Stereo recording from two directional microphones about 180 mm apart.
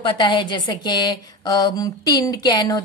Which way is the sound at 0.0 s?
25° left (ahead or behind).